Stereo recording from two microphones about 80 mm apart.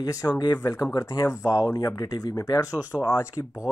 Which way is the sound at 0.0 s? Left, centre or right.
Left.